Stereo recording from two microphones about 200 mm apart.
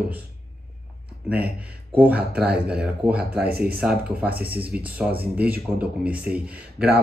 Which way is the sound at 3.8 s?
5° right (ahead or behind).